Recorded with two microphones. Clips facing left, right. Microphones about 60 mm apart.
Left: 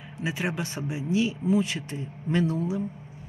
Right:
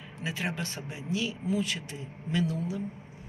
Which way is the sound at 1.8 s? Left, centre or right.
Left.